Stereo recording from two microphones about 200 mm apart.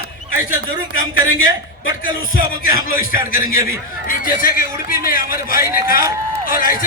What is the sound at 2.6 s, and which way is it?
A man's voice, 45° left (ahead or behind).